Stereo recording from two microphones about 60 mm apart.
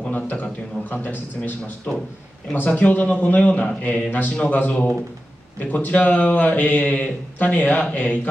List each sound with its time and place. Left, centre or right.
0.1 s a man's voice: left
2.5 s a man's voice: left